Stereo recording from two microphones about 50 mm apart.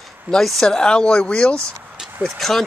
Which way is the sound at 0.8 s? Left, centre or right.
Centre.